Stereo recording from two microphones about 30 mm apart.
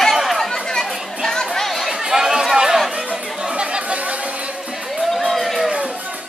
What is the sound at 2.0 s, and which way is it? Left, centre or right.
Chatter, centre.